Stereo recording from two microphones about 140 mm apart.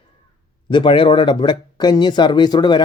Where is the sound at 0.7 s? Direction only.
35° left (ahead or behind).